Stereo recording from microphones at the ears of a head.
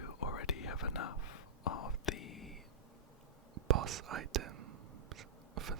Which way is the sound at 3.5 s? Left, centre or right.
Right.